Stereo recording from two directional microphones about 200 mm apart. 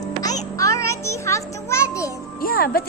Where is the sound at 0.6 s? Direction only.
15° left (ahead or behind).